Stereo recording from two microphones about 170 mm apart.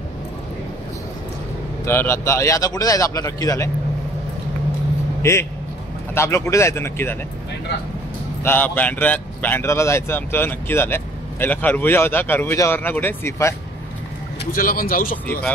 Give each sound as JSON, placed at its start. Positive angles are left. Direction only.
{"t": 1.9, "sound": "a man's voice", "side_deg": 15}
{"t": 5.2, "sound": "speech", "side_deg": 15}
{"t": 8.5, "sound": "speech", "side_deg": 10}
{"t": 14.4, "sound": "speech", "side_deg": 55}